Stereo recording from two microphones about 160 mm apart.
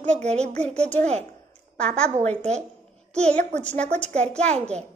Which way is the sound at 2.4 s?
45° right (ahead or behind).